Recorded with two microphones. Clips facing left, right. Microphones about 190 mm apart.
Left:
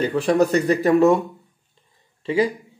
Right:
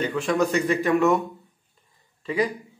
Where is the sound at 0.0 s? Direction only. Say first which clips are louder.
Left 5 dB; 35° left (ahead or behind).